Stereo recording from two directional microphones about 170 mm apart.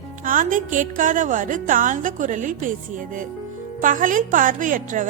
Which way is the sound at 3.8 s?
50° right (ahead or behind).